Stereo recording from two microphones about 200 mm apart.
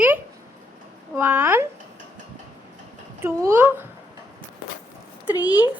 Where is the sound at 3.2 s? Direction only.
10° right (ahead or behind).